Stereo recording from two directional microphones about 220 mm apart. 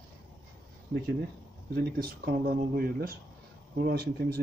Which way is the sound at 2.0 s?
45° right (ahead or behind).